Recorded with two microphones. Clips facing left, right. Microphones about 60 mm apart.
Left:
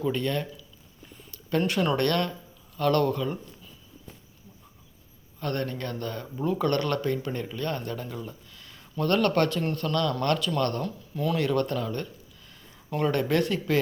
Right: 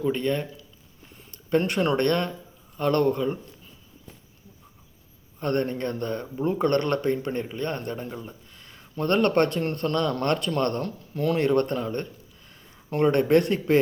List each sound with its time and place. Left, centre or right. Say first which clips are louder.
0.0 s speech: right 2 dB; right
1.5 s speech: right 2 dB; right
5.4 s speech: right 5 dB; right
10.8 s speech: right 3 dB; right
11.3 s speech: right 3 dB; right